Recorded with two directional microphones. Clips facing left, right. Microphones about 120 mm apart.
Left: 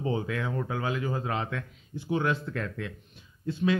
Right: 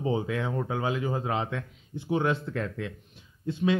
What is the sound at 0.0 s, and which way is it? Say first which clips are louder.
Speech: right 2 dB; 20° right (ahead or behind).